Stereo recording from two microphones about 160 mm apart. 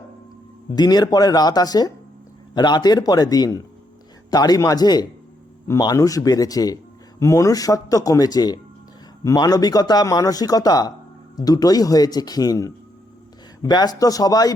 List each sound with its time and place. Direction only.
0.8 s speech: 25° left (ahead or behind)